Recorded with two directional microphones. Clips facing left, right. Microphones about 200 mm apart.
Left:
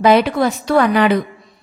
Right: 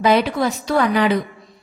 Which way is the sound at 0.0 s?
60° left (ahead or behind).